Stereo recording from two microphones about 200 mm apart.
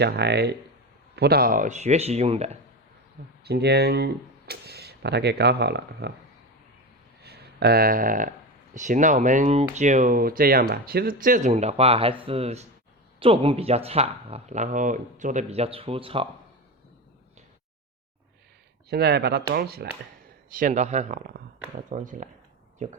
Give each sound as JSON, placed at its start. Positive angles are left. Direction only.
{"t": 0.0, "sound": "speech", "side_deg": -55}
{"t": 3.4, "sound": "speech", "side_deg": -55}
{"t": 7.2, "sound": "a sound", "side_deg": -50}
{"t": 8.7, "sound": "speech", "side_deg": -40}
{"t": 18.9, "sound": "speech", "side_deg": -55}